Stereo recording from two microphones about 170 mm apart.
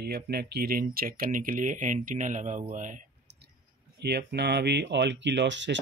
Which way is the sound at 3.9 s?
75° right (ahead or behind).